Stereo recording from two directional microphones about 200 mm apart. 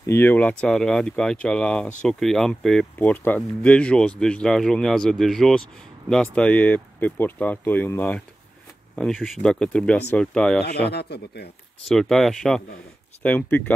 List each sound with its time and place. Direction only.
0.0 s speech: 10° left (ahead or behind)
10.6 s speech: 55° left (ahead or behind)
11.9 s speech: centre (ahead or behind)